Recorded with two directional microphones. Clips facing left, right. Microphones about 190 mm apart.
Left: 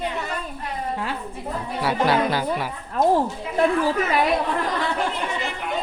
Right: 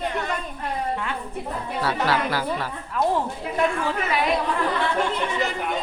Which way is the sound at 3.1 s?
35° left (ahead or behind).